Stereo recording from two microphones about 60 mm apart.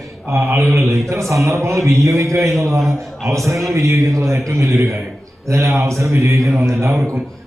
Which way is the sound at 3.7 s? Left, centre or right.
Right.